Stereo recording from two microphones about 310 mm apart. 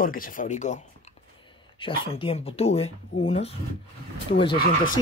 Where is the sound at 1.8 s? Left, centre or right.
Centre.